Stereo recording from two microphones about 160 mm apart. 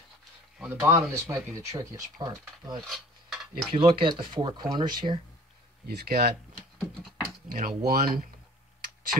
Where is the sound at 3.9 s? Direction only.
30° right (ahead or behind).